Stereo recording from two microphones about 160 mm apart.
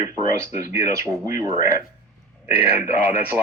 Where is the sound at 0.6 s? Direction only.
20° right (ahead or behind).